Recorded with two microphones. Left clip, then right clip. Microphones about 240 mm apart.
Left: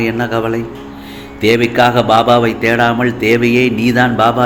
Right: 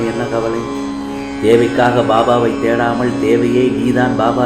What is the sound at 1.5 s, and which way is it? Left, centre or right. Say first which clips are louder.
Speech: left 1 dB; left.